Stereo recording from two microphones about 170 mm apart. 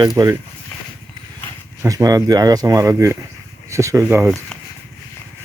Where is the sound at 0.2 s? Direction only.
20° right (ahead or behind).